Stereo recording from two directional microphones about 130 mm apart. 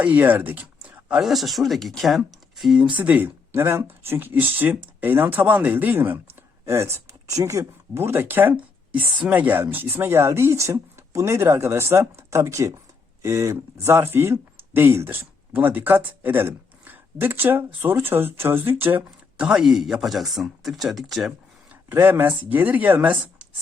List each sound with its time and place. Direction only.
0.0 s speech: 10° right (ahead or behind)
3.0 s speech: 10° right (ahead or behind)
21.8 s speech: 15° right (ahead or behind)